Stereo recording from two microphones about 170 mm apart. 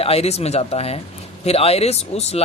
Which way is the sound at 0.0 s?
35° left (ahead or behind).